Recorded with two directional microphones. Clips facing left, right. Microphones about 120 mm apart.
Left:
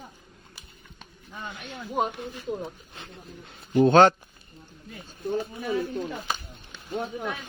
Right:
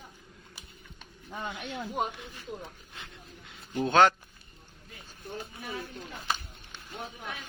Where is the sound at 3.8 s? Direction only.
35° left (ahead or behind).